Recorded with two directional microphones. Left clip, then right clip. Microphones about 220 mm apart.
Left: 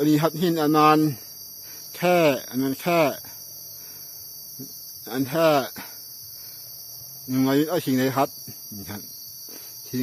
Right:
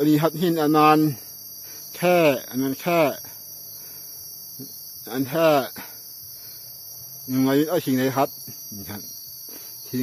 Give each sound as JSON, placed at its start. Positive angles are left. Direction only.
{"t": 0.0, "sound": "speech", "side_deg": 0}
{"t": 5.0, "sound": "speech", "side_deg": 0}
{"t": 7.3, "sound": "speech", "side_deg": 0}
{"t": 9.9, "sound": "speech", "side_deg": 0}